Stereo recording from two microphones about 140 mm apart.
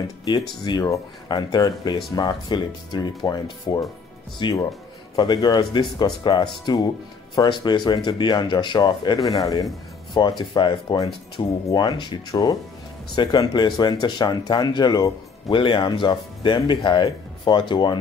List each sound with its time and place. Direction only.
0.2 s speech: 30° left (ahead or behind)